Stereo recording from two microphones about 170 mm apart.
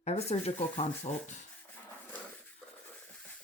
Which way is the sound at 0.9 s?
10° left (ahead or behind).